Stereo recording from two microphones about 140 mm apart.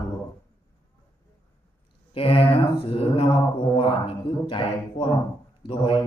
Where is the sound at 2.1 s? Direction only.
40° left (ahead or behind).